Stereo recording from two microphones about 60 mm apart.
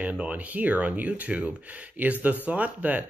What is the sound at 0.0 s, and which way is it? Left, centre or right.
Speech, right.